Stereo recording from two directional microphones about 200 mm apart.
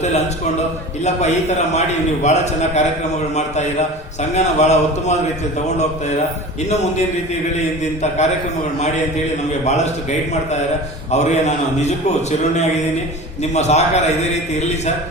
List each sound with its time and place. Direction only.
1.0 s a man's voice: 35° left (ahead or behind)
9.6 s a man's voice: 35° left (ahead or behind)
11.1 s a man's voice: 35° left (ahead or behind)